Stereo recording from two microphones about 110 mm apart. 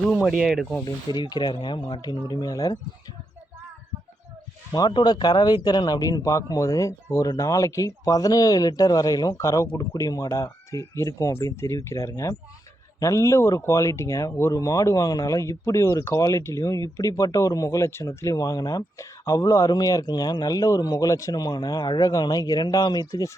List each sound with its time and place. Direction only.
0.3 s rub: centre (ahead or behind)
1.1 s speech: 40° left (ahead or behind)
4.7 s speech: 40° left (ahead or behind)